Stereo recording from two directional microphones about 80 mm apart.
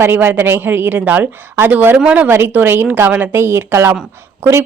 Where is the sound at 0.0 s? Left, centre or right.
Right.